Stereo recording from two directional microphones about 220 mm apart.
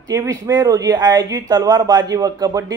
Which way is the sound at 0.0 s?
15° right (ahead or behind).